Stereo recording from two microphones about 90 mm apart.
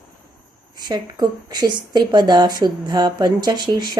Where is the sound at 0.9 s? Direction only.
50° right (ahead or behind).